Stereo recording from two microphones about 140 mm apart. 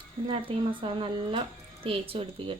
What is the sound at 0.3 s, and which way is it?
A woman's voice, 40° right (ahead or behind).